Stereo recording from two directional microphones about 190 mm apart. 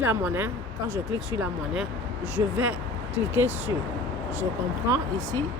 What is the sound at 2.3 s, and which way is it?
Speech, 10° right (ahead or behind).